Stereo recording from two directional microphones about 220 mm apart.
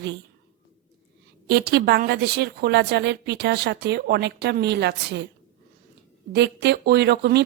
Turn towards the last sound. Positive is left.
turn(degrees=-50)  # may be behind; listen again after turning